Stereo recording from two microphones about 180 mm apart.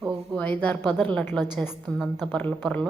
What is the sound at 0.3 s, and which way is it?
A woman's voice, 10° left (ahead or behind).